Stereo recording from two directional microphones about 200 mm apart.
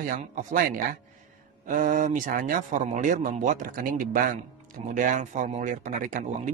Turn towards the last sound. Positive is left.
turn(degrees=-40)  # may be behind; listen again after turning